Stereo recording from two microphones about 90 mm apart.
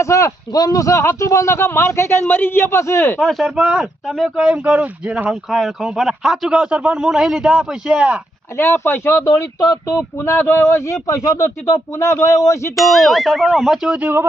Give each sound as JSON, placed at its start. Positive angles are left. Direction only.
{"t": 0.0, "sound": "speech", "side_deg": 35}
{"t": 3.2, "sound": "speech", "side_deg": 0}
{"t": 8.5, "sound": "speech", "side_deg": 25}
{"t": 12.7, "sound": "speech", "side_deg": 0}
{"t": 14.0, "sound": "speech", "side_deg": -25}